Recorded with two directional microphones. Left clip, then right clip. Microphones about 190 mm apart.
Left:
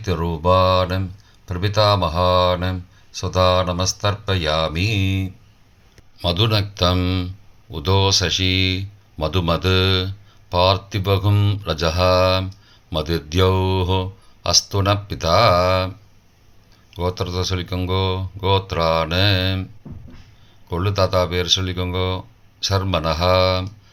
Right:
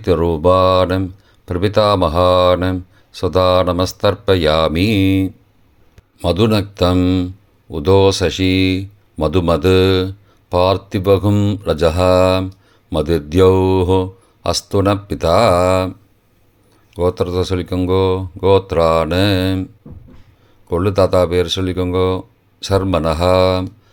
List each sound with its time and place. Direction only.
0.0 s speech: 45° right (ahead or behind)
16.9 s speech: 45° right (ahead or behind)
20.7 s speech: 45° right (ahead or behind)